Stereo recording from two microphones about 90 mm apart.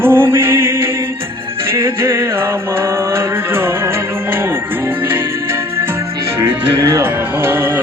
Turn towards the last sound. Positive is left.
turn(degrees=-25)  # may be behind; listen again after turning